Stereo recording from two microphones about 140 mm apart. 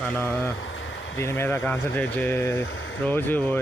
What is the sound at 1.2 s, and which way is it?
Speech, 20° left (ahead or behind).